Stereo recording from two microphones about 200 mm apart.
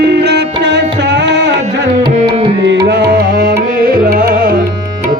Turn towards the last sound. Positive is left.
turn(degrees=-45)  # may be behind; listen again after turning